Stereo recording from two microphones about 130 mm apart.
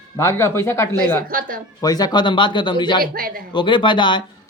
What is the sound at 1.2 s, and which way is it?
Speech, 90° right.